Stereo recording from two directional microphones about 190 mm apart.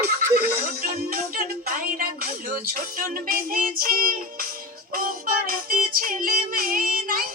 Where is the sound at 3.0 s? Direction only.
50° right (ahead or behind).